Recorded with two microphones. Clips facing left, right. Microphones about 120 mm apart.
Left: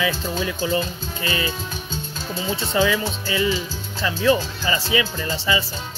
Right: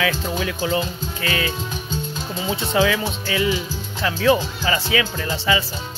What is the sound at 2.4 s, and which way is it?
Speech, 15° right (ahead or behind).